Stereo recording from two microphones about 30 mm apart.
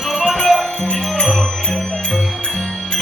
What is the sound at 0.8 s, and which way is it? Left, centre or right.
Music, left.